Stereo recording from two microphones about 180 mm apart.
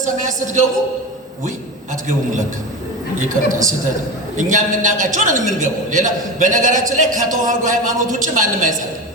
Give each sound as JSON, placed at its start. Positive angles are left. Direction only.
{"t": 0.0, "sound": "a man's voice", "side_deg": -45}
{"t": 3.2, "sound": "a man's voice", "side_deg": -45}